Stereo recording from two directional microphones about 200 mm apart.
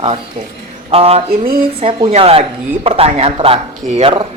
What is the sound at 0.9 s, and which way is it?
A man's voice, 30° right (ahead or behind).